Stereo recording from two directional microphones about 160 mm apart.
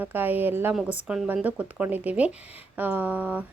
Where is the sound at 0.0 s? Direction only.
10° right (ahead or behind).